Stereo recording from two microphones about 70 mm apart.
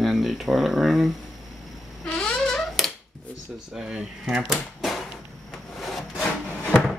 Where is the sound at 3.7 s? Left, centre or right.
Centre.